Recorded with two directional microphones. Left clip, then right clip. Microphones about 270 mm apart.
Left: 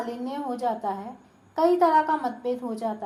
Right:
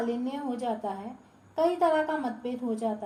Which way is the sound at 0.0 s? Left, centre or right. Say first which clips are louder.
Left 1 dB; left.